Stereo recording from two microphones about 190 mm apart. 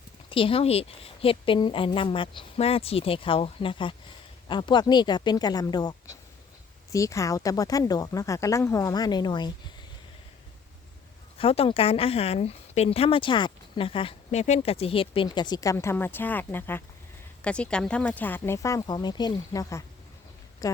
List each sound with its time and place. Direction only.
0.3 s speech: 30° left (ahead or behind)
6.9 s speech: 15° left (ahead or behind)
11.3 s speech: 30° left (ahead or behind)